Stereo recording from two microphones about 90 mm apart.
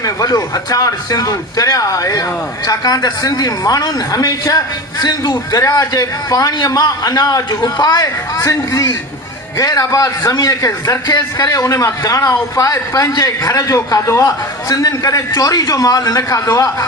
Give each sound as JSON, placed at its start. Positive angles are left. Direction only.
{"t": 0.0, "sound": "a man's voice", "side_deg": 40}